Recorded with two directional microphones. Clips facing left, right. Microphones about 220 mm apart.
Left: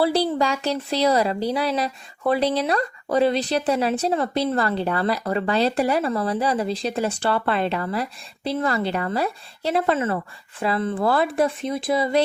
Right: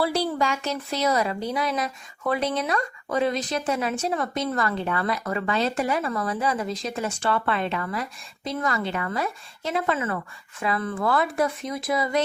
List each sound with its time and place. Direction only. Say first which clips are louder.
0.0 s speech: left 4 dB; 35° left (ahead or behind)